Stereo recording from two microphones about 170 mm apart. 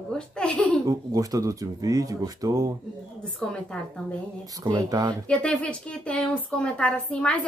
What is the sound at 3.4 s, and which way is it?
Speech, 5° left (ahead or behind).